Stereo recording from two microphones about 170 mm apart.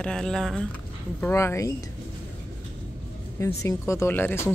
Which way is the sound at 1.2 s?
15° left (ahead or behind).